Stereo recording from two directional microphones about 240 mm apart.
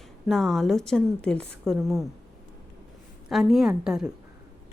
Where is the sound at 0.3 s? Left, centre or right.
Centre.